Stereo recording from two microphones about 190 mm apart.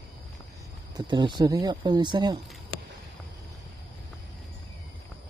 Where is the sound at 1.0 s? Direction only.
25° right (ahead or behind).